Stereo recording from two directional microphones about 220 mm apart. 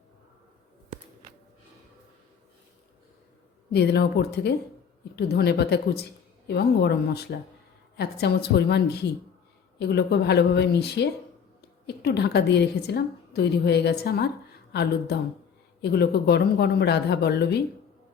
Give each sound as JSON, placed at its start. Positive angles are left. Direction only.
{"t": 3.7, "sound": "a woman's voice", "side_deg": 50}